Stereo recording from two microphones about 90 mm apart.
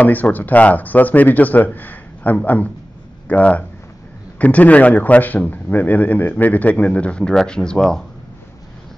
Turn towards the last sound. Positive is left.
turn(degrees=10)  # may be behind; listen again after turning